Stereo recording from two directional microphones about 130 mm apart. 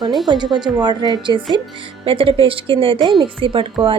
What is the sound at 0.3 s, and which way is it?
Speech, 35° right (ahead or behind).